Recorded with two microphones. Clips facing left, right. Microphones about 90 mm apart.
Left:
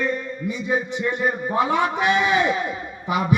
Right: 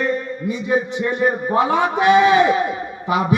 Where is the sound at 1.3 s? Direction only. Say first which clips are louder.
Right 3 dB; 20° right (ahead or behind).